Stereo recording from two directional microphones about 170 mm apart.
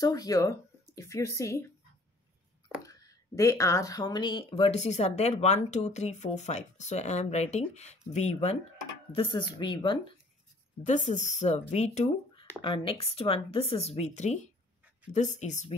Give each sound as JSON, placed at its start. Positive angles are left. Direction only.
{"t": 0.0, "sound": "speech", "side_deg": 20}
{"t": 2.8, "sound": "speech", "side_deg": 20}
{"t": 10.8, "sound": "speech", "side_deg": 45}